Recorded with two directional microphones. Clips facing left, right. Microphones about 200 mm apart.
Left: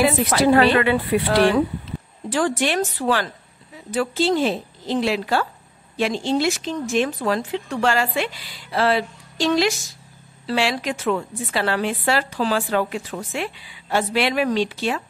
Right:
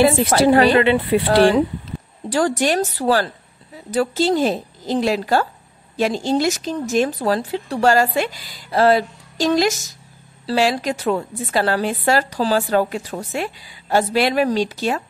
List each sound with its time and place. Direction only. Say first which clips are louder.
0.0 s a woman's voice: right 3 dB; 30° right (ahead or behind)